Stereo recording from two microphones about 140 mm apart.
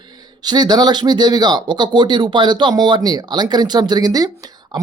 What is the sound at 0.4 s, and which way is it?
Speech, 30° right (ahead or behind).